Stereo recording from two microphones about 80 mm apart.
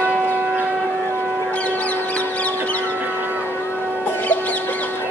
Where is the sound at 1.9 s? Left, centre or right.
Centre.